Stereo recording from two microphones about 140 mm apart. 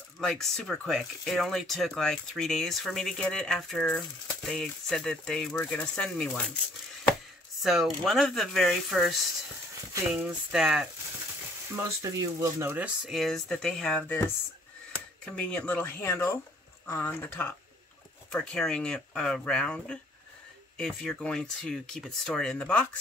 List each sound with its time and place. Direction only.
0.2 s speech: 5° left (ahead or behind)
7.6 s speech: centre (ahead or behind)
11.7 s speech: 20° right (ahead or behind); by 22.8 s 10° left (ahead or behind)